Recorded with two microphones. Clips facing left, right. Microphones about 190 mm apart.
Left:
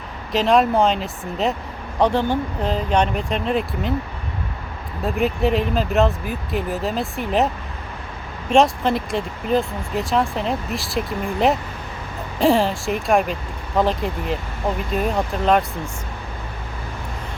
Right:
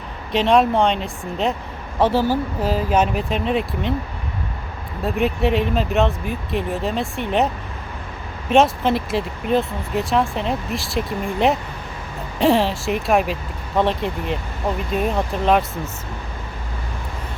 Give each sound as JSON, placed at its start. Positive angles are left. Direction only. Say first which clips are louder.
{"t": 0.3, "sound": "speech", "louder": "right 1 dB", "side_deg": 0}
{"t": 5.0, "sound": "speech", "louder": "even", "side_deg": 0}